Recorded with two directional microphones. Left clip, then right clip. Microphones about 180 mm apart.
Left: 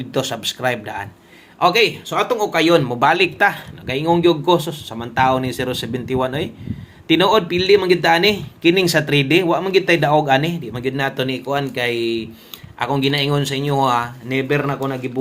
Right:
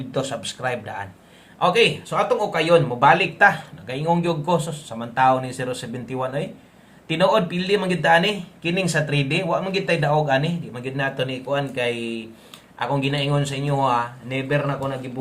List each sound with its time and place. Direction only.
0.1 s speech: 30° left (ahead or behind)